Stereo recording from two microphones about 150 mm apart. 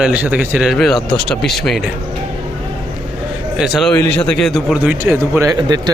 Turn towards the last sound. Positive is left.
turn(degrees=-25)  # may be behind; listen again after turning